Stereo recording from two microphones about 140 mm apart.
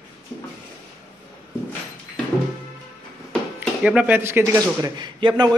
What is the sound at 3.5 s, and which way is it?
Speech, 10° right (ahead or behind).